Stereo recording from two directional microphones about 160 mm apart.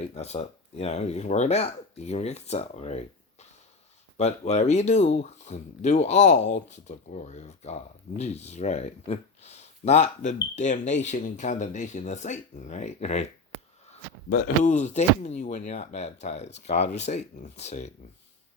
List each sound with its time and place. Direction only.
0.1 s speech: 40° left (ahead or behind)
4.2 s speech: 45° left (ahead or behind)
14.3 s speech: 60° left (ahead or behind); by 17.9 s 45° left (ahead or behind)